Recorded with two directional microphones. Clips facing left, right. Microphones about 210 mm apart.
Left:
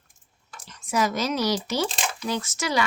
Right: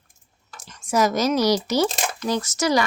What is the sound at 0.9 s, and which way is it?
A woman's voice, 40° right (ahead or behind).